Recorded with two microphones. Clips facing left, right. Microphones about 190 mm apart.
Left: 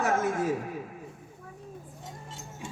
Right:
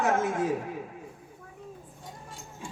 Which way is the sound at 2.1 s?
25° left (ahead or behind).